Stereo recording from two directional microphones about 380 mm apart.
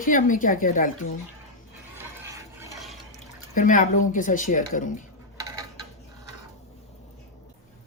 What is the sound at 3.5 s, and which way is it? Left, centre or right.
Speech, left.